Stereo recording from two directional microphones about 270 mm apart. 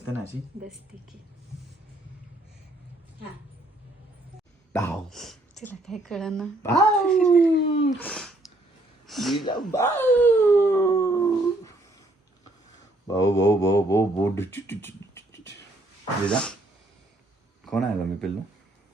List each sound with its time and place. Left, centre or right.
4.7 s speech: centre
7.7 s speech: left
7.9 s speech: centre
13.1 s a sound: centre
16.2 s speech: centre
17.7 s speech: centre